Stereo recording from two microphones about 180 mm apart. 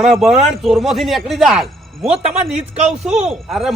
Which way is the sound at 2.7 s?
35° right (ahead or behind).